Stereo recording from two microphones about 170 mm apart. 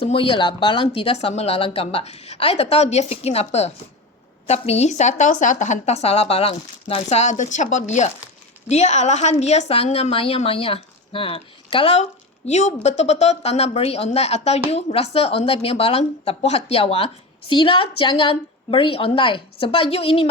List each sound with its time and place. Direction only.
0.0 s a woman's voice: 35° left (ahead or behind)